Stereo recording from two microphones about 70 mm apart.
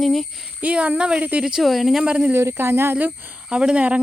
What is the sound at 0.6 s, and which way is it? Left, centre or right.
Speech, centre.